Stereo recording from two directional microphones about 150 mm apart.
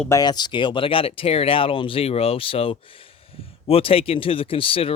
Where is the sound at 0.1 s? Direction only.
25° left (ahead or behind).